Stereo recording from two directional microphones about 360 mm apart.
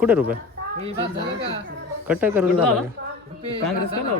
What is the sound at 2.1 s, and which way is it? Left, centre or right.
Speech, centre.